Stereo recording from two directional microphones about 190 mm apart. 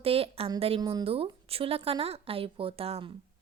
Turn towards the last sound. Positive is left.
turn(degrees=-30)  # may be behind; listen again after turning